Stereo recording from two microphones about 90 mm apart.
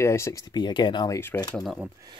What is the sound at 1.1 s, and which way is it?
Speech, 25° left (ahead or behind).